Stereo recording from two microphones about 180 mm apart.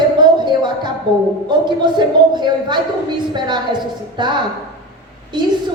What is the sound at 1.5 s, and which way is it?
A woman's voice, 25° right (ahead or behind).